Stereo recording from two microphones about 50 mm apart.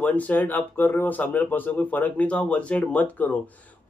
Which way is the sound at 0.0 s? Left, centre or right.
Left.